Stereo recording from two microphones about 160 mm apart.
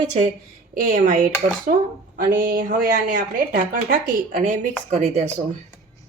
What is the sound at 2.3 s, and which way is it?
Speech, 70° right (ahead or behind).